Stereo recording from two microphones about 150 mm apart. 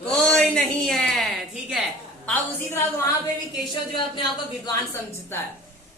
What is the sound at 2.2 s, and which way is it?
Speech, 10° left (ahead or behind).